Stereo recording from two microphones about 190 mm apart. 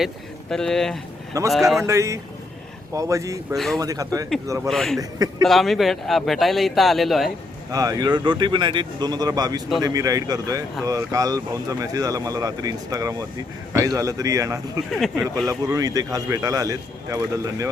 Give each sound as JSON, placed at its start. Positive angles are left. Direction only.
{"t": 0.5, "sound": "speech", "side_deg": 5}
{"t": 1.3, "sound": "a man's voice", "side_deg": -15}
{"t": 4.7, "sound": "speech", "side_deg": 0}
{"t": 7.7, "sound": "a man's voice", "side_deg": -20}
{"t": 14.9, "sound": "speech", "side_deg": 0}
{"t": 15.4, "sound": "a man's voice", "side_deg": -15}